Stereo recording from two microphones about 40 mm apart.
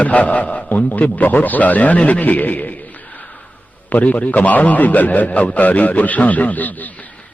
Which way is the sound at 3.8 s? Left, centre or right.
Left.